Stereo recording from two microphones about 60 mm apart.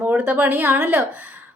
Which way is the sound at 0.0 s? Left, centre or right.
Right.